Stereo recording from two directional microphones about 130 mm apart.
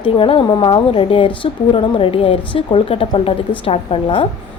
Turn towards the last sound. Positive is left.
turn(degrees=45)  # may be behind; listen again after turning